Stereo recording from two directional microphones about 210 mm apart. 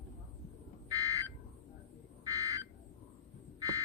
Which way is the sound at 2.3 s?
15° right (ahead or behind).